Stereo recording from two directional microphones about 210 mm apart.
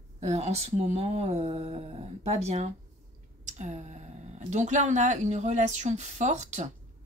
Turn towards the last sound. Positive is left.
turn(degrees=-35)  # may be behind; listen again after turning